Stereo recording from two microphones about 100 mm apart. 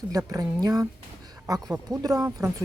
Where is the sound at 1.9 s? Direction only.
35° right (ahead or behind).